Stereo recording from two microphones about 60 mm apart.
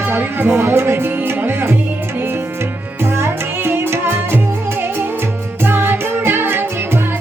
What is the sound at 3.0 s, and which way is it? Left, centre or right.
Music, right.